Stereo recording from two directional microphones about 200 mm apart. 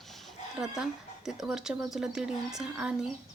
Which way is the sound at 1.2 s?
5° right (ahead or behind).